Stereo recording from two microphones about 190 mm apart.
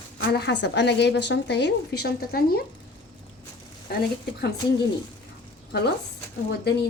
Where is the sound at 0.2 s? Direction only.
65° left (ahead or behind).